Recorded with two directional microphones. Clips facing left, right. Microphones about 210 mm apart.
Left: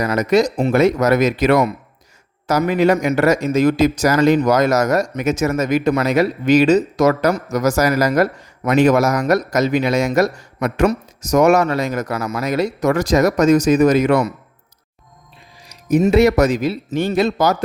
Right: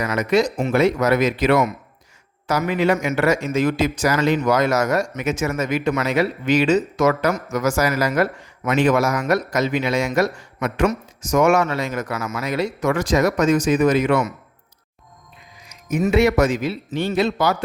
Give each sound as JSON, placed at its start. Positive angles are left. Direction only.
{"t": 0.0, "sound": "a man's voice", "side_deg": 40}
{"t": 15.5, "sound": "a man's voice", "side_deg": 35}